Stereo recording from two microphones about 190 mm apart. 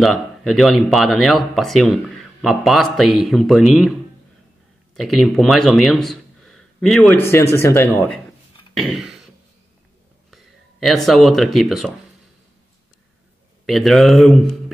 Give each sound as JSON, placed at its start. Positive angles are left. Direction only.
{"t": 0.0, "sound": "speech", "side_deg": 0}
{"t": 4.9, "sound": "speech", "side_deg": 0}
{"t": 8.7, "sound": "throat clearing", "side_deg": 0}
{"t": 10.3, "sound": "speech", "side_deg": 0}
{"t": 13.7, "sound": "speech", "side_deg": 0}